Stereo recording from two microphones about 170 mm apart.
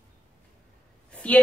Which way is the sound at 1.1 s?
5° left (ahead or behind).